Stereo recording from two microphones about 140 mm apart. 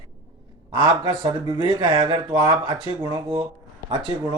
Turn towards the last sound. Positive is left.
turn(degrees=-35)  # may be behind; listen again after turning